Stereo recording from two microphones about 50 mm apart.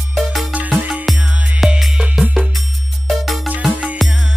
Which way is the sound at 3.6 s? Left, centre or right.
Right.